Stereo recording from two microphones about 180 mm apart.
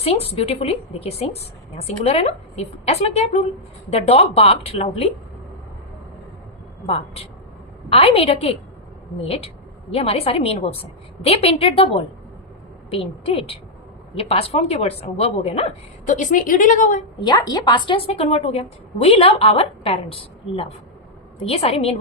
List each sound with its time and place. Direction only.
0.0 s a woman's voice: 35° left (ahead or behind)
6.8 s a woman's voice: 35° left (ahead or behind)
12.9 s a woman's voice: 30° left (ahead or behind)
17.2 s a woman's voice: 20° left (ahead or behind)